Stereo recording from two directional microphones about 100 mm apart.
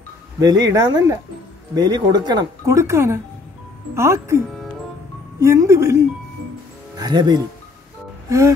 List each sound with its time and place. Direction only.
0.4 s speech: 40° right (ahead or behind)
2.6 s speech: 30° right (ahead or behind)
5.4 s speech: 30° right (ahead or behind)
7.0 s speech: 45° right (ahead or behind)
8.3 s speech: 30° right (ahead or behind)